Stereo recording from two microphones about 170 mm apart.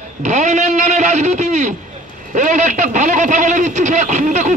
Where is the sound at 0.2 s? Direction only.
45° right (ahead or behind).